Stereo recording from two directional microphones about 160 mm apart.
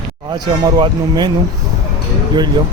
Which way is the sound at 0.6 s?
25° right (ahead or behind).